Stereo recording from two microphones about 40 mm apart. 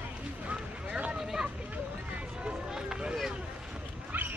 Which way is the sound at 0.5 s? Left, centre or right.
Right.